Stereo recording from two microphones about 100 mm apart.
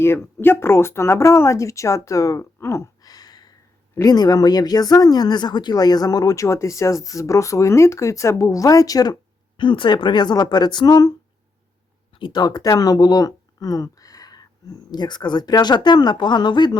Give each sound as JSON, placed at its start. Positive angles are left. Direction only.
{"t": 0.0, "sound": "speech", "side_deg": 25}
{"t": 9.6, "sound": "speech", "side_deg": 55}
{"t": 12.1, "sound": "speech", "side_deg": 50}